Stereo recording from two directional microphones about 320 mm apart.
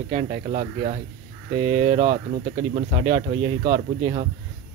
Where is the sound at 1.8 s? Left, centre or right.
Centre.